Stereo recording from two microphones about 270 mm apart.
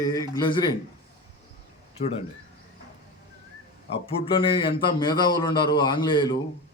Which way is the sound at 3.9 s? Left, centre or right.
Centre.